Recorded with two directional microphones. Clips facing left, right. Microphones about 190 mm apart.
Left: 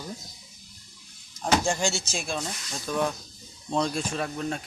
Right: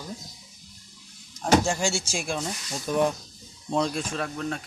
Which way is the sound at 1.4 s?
5° right (ahead or behind).